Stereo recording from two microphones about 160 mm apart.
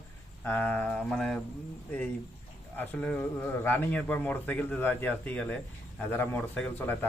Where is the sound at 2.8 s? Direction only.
10° left (ahead or behind).